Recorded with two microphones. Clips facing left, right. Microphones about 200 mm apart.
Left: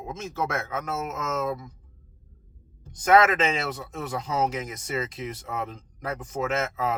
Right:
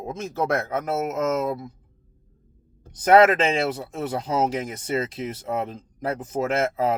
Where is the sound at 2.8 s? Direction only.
35° right (ahead or behind).